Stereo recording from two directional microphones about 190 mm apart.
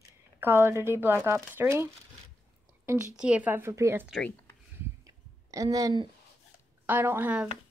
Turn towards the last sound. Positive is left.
turn(degrees=-10)  # may be behind; listen again after turning